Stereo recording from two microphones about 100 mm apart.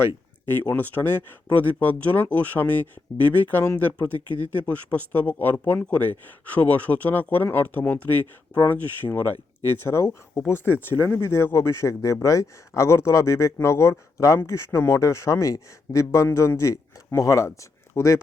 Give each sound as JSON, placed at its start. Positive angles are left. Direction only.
{"t": 0.4, "sound": "speech", "side_deg": 20}